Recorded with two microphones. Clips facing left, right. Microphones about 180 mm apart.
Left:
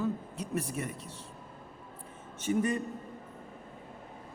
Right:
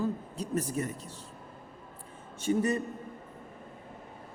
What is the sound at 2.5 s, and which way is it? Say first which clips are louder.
Speech: right 2 dB; 30° right (ahead or behind).